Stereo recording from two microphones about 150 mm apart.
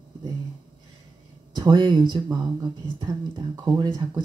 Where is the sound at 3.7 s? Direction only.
30° right (ahead or behind).